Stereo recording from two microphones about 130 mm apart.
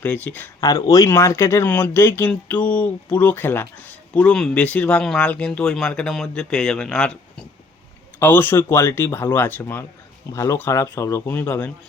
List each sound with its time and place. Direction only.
0.0 s speech: 15° left (ahead or behind)
0.6 s speech: 25° left (ahead or behind); by 7.4 s 5° left (ahead or behind)
8.2 s speech: 15° left (ahead or behind)